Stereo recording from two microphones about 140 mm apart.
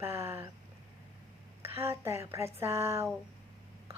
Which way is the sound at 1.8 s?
20° right (ahead or behind).